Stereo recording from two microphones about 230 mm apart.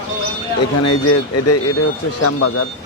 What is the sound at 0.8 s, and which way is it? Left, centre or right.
Speech, left.